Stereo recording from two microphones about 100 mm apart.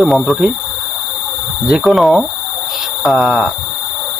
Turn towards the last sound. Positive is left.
turn(degrees=-5)  # may be behind; listen again after turning